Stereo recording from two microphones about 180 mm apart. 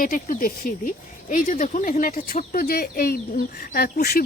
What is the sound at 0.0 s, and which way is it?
Speech, 50° left (ahead or behind).